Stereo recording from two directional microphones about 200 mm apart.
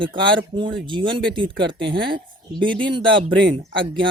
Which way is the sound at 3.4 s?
70° right (ahead or behind).